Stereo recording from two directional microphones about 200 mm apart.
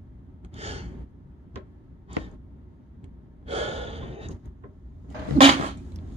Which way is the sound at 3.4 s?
30° right (ahead or behind).